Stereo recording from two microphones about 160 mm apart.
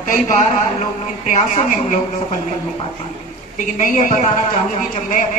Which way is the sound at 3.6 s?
55° left (ahead or behind).